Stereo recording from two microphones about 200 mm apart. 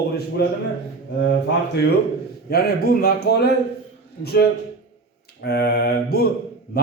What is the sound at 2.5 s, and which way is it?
A man's voice, 50° left (ahead or behind).